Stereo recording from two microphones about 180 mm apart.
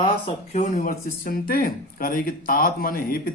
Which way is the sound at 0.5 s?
40° left (ahead or behind).